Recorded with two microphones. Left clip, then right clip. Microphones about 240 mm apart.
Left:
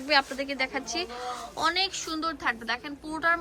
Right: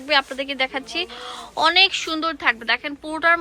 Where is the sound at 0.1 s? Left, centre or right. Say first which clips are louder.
Right 5 dB; centre.